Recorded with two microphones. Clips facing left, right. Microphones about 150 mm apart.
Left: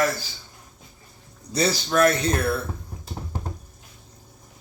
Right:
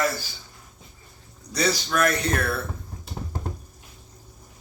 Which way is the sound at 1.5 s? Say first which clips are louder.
Left 3 dB; 30° left (ahead or behind).